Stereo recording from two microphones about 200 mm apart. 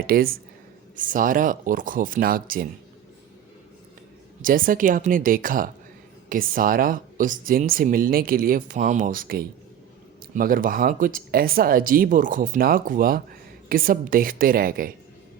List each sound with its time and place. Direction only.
0.1 s speech: 45° right (ahead or behind)
4.4 s speech: 45° right (ahead or behind)